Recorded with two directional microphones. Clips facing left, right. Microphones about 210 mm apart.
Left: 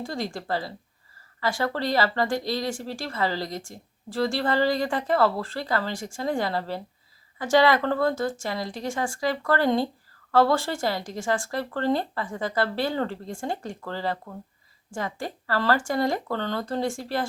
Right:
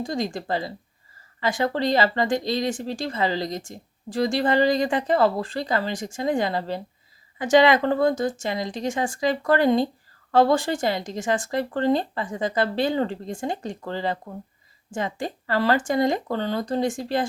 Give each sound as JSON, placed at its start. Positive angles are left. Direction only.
{"t": 0.0, "sound": "speech", "side_deg": -15}